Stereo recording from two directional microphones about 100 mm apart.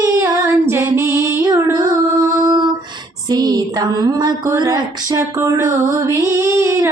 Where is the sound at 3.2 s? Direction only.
45° right (ahead or behind).